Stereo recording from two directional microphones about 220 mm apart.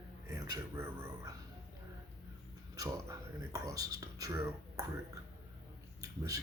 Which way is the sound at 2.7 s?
15° right (ahead or behind).